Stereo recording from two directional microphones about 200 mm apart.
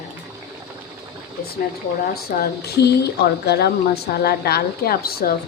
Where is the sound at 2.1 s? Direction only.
50° left (ahead or behind).